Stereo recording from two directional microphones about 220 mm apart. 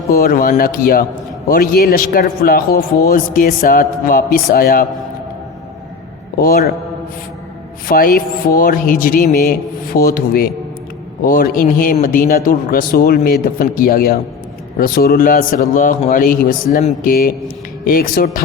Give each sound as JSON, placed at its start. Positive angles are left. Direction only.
{"t": 0.1, "sound": "a man's voice", "side_deg": 40}
{"t": 6.3, "sound": "a man's voice", "side_deg": 40}
{"t": 7.9, "sound": "a man's voice", "side_deg": 40}